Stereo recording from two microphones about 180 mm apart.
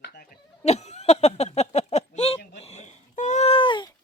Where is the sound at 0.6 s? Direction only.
40° left (ahead or behind).